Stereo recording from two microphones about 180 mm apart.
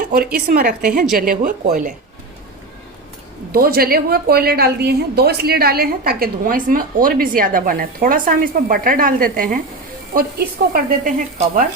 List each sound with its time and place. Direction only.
0.0 s stir: 60° right (ahead or behind)
3.5 s a woman's voice: 55° right (ahead or behind)
10.2 s stir: 55° right (ahead or behind)